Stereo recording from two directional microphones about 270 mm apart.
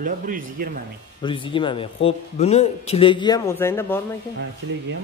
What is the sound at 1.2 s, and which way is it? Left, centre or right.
A man's voice, centre.